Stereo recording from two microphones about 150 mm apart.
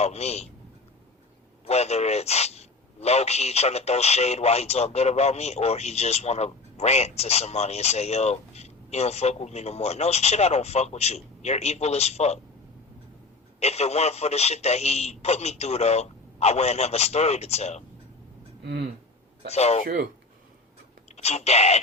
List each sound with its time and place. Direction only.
0.0 s a man's voice: 45° left (ahead or behind)
1.6 s a man's voice: 45° left (ahead or behind)
13.6 s a man's voice: 45° left (ahead or behind)
18.6 s speech: 80° right
19.5 s a man's voice: 45° left (ahead or behind)
21.2 s a man's voice: 45° left (ahead or behind)